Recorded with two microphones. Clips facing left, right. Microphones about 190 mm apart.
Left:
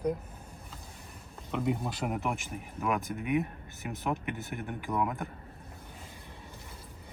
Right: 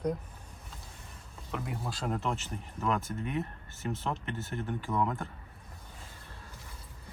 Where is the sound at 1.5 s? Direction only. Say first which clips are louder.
Left 6 dB; 20° left (ahead or behind).